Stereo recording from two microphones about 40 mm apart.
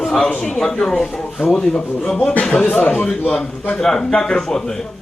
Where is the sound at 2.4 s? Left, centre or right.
Left.